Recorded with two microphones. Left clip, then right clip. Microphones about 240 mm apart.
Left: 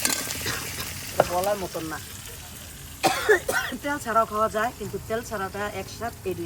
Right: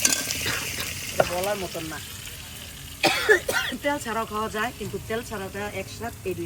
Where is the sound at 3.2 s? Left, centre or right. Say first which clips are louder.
Right 1 dB; centre.